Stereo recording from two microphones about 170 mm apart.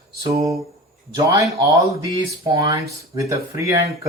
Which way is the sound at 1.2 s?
20° right (ahead or behind).